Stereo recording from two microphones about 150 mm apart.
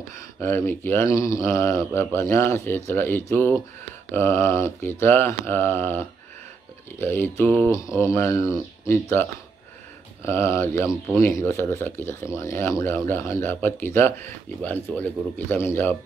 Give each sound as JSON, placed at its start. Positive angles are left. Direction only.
{"t": 0.4, "sound": "speech", "side_deg": 15}
{"t": 10.9, "sound": "speech", "side_deg": -5}
{"t": 11.2, "sound": "speech", "side_deg": 15}